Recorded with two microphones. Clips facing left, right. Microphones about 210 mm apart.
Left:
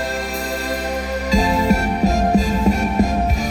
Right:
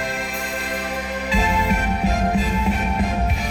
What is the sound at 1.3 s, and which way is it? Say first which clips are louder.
Music: left 5 dB; 40° left (ahead or behind).